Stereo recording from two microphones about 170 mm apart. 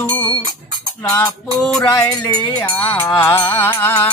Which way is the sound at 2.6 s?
10° left (ahead or behind).